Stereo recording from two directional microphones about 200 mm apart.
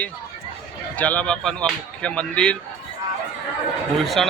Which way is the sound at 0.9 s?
5° left (ahead or behind).